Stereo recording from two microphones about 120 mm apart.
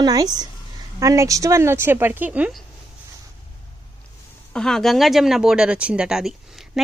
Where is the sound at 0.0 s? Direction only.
30° right (ahead or behind); by 2.5 s 15° right (ahead or behind).